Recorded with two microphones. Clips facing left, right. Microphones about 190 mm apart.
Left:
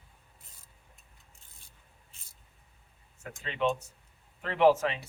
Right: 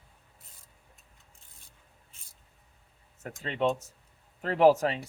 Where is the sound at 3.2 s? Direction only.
40° right (ahead or behind).